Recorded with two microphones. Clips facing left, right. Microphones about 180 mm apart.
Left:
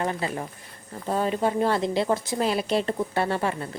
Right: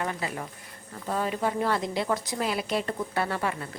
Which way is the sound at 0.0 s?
30° left (ahead or behind).